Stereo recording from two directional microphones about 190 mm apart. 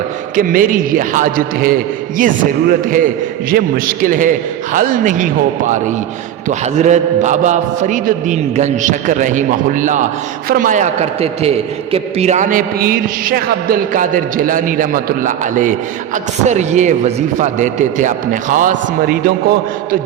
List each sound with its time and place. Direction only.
0.3 s a man's voice: 45° right (ahead or behind)